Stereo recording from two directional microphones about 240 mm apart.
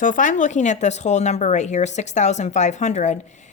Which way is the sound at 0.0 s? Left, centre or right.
Left.